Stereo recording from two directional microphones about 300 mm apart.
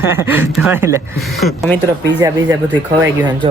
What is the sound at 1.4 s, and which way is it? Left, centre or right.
Speech, centre.